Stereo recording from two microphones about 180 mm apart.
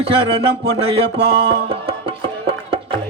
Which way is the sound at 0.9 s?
30° right (ahead or behind).